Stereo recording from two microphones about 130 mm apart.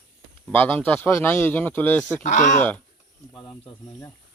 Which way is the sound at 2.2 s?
70° left (ahead or behind).